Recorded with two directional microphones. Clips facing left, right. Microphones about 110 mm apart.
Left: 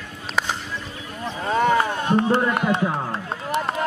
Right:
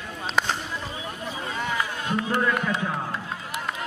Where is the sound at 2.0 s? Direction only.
35° left (ahead or behind).